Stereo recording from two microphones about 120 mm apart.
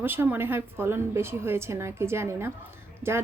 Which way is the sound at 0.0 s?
20° right (ahead or behind).